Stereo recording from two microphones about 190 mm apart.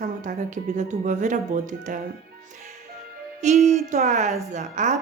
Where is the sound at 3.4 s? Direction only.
40° right (ahead or behind).